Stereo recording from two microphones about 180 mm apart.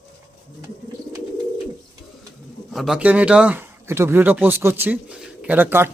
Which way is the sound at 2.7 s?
Centre (ahead or behind).